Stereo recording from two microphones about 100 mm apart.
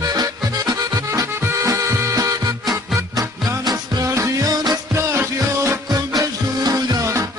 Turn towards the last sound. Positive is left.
turn(degrees=-30)  # may be behind; listen again after turning